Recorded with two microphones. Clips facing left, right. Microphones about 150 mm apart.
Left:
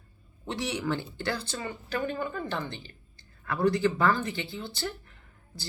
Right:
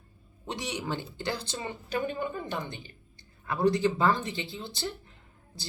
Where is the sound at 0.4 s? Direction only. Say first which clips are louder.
Left 3 dB; 15° right (ahead or behind).